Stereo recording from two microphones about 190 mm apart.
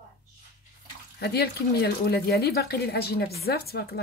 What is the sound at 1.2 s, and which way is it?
Speech, 60° left (ahead or behind).